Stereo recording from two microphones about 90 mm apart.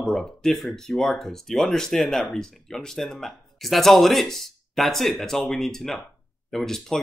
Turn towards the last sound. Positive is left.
turn(degrees=5)  # may be behind; listen again after turning